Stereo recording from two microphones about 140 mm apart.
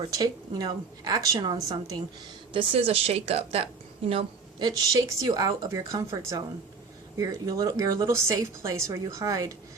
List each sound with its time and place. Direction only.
0.1 s a woman's voice: 25° right (ahead or behind)
2.5 s a woman's voice: 40° right (ahead or behind)
4.6 s a woman's voice: 25° right (ahead or behind)